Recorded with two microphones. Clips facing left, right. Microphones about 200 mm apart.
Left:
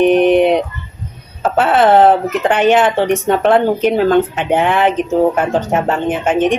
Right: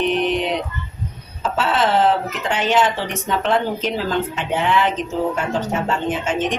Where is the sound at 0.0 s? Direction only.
55° left (ahead or behind).